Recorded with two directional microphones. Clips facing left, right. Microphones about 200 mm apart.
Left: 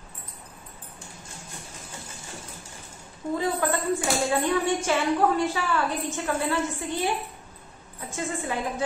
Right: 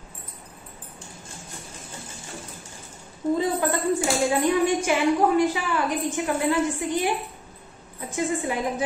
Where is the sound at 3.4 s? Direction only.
15° right (ahead or behind).